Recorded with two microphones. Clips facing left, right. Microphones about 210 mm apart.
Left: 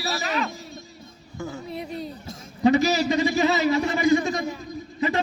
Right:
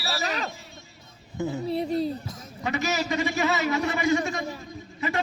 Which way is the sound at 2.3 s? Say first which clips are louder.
Left 11 dB; 35° left (ahead or behind).